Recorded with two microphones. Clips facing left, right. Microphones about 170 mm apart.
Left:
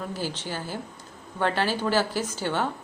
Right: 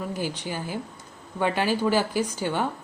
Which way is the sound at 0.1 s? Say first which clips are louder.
Right 2 dB; 15° right (ahead or behind).